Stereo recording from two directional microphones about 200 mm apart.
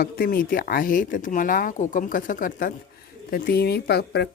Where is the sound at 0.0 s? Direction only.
45° left (ahead or behind).